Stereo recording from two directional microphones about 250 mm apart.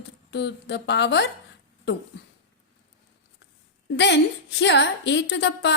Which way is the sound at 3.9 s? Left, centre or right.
Left.